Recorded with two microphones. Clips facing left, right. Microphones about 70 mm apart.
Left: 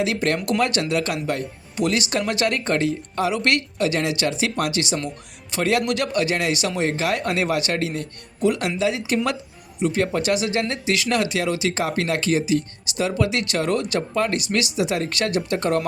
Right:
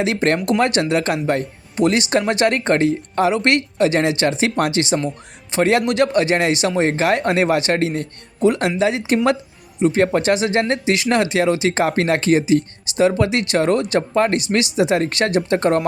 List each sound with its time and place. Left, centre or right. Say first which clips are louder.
0.0 s speech: right 4 dB; right